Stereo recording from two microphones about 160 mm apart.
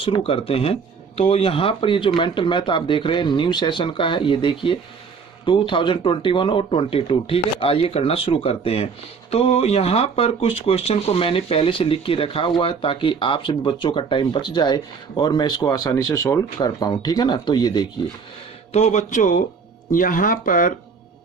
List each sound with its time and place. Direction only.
0.0 s speech: 35° left (ahead or behind)
18.7 s speech: 45° left (ahead or behind)